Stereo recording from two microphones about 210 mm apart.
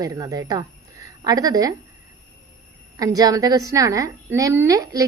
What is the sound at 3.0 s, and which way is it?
A woman's voice, 15° right (ahead or behind).